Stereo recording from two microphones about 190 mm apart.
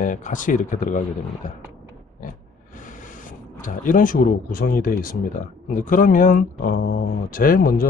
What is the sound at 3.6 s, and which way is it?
Speech, 45° left (ahead or behind).